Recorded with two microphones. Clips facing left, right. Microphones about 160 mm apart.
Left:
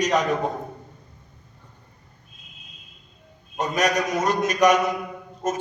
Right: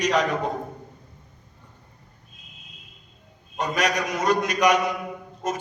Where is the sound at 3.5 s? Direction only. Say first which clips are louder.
Left 2 dB; 45° left (ahead or behind).